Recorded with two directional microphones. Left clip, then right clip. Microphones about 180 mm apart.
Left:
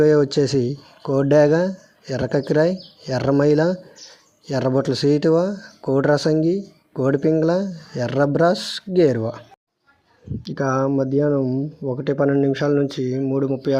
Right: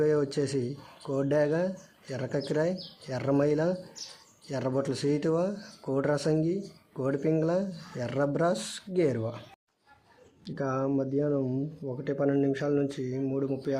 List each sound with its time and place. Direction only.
0.0 s speech: 35° left (ahead or behind)
10.4 s speech: 30° left (ahead or behind)